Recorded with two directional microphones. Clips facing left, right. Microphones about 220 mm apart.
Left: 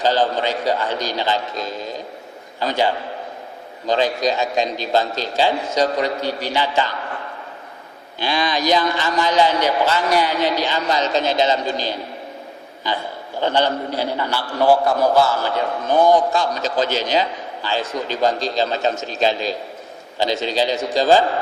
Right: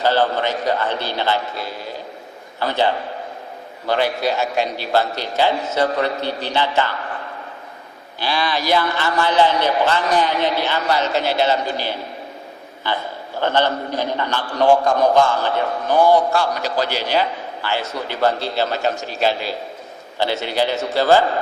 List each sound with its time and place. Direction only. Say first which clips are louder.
0.0 s a man's voice: even; 15° left (ahead or behind)
1.5 s a man's voice: left 2 dB; 10° right (ahead or behind)
2.6 s a man's voice: even; 15° left (ahead or behind)
8.3 s a man's voice: left 1 dB; 20° left (ahead or behind)
13.4 s a man's voice: even; 15° left (ahead or behind)
20.1 s a man's voice: even; 15° left (ahead or behind)